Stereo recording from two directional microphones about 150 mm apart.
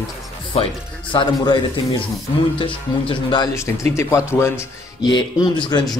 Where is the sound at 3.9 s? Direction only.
20° left (ahead or behind).